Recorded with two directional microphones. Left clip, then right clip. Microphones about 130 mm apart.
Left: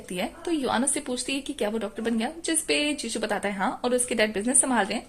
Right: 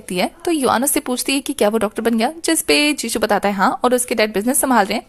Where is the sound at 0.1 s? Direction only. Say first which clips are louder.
Right 10 dB; 40° right (ahead or behind).